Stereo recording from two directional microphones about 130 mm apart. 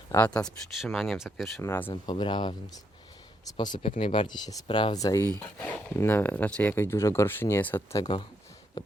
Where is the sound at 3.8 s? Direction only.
45° left (ahead or behind); by 5.2 s 25° left (ahead or behind).